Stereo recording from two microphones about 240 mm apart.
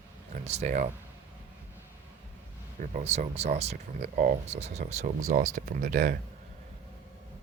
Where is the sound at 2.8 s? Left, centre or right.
Right.